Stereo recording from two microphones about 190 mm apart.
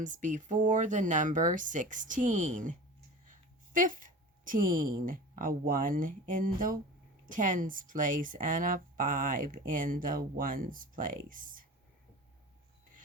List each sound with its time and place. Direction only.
0.0 s speech: 40° right (ahead or behind)